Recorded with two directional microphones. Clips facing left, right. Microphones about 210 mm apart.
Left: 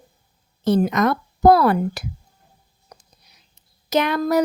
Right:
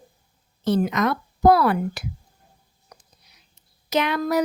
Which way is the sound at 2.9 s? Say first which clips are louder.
Left 3 dB; 35° left (ahead or behind).